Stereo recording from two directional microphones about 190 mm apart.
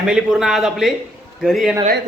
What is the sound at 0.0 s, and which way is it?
A man's voice, 5° right (ahead or behind).